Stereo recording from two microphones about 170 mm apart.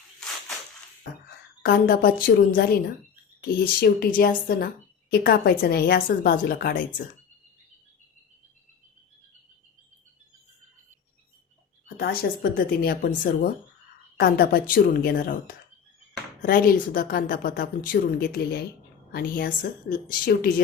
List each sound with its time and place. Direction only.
1.6 s a woman's voice: 65° left (ahead or behind)
11.9 s a woman's voice: 65° left (ahead or behind)
14.2 s a woman's voice: 65° left (ahead or behind)
16.4 s a woman's voice: 55° left (ahead or behind)